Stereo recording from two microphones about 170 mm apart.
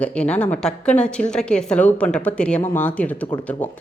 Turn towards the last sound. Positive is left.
turn(degrees=10)  # may be behind; listen again after turning